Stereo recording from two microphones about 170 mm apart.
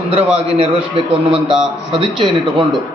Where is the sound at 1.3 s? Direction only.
5° right (ahead or behind).